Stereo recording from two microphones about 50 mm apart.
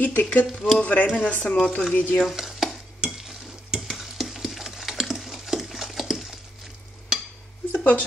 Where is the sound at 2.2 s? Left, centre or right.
Centre.